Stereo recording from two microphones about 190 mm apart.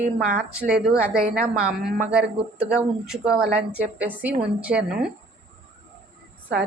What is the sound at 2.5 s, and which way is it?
A woman's voice, 5° right (ahead or behind).